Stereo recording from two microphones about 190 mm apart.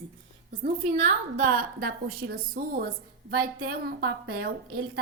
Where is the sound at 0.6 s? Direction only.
40° right (ahead or behind).